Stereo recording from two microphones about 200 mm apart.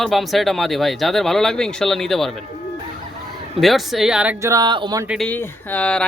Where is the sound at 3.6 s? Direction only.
Centre (ahead or behind); by 5.0 s 20° right (ahead or behind).